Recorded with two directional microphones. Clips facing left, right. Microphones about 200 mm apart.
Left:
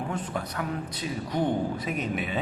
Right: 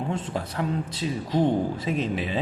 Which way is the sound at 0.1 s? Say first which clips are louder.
Right 2 dB; 25° right (ahead or behind).